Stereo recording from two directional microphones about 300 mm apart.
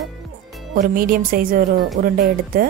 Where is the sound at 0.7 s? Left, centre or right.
Right.